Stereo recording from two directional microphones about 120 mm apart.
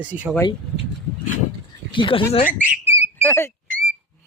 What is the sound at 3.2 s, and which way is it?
Speech, 20° left (ahead or behind).